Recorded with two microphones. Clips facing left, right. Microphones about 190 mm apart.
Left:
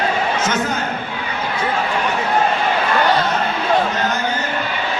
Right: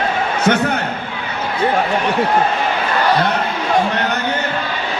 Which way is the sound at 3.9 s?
65° right (ahead or behind).